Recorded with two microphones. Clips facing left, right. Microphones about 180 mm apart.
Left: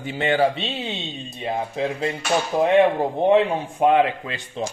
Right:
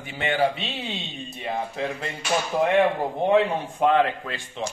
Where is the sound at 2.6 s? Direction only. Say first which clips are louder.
Left 4 dB; 20° left (ahead or behind).